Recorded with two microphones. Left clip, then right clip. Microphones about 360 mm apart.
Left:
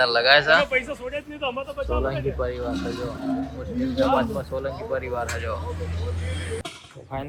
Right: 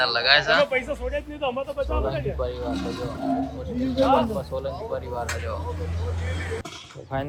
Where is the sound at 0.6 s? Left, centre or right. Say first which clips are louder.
Even; right.